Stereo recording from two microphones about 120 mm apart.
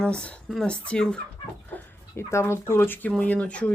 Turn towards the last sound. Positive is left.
turn(degrees=10)  # may be behind; listen again after turning